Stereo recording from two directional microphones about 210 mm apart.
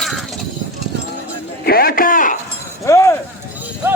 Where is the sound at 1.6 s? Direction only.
45° left (ahead or behind).